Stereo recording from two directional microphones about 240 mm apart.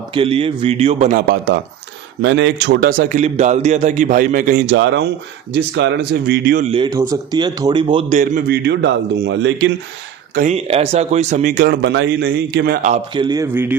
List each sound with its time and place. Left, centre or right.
0.1 s a man's voice: right
2.2 s a man's voice: right
6.7 s a man's voice: centre
8.2 s a man's voice: right
10.3 s a man's voice: right
13.1 s speech: centre